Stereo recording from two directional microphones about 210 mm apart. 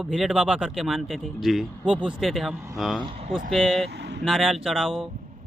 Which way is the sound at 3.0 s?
25° right (ahead or behind).